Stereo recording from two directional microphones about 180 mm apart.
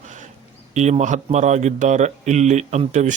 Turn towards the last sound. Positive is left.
turn(degrees=-40)  # may be behind; listen again after turning